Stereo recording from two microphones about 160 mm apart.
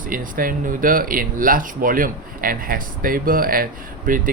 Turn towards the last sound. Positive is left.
turn(degrees=-60)  # may be behind; listen again after turning